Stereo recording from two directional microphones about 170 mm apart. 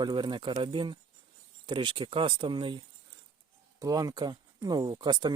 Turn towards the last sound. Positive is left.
turn(degrees=-25)  # may be behind; listen again after turning